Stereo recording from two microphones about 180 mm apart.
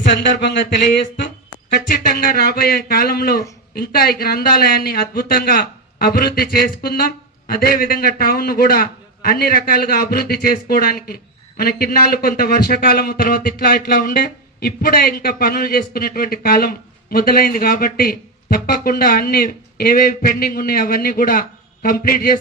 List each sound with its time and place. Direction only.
0.0 s speech: 70° left (ahead or behind)
1.9 s speech: 55° left (ahead or behind)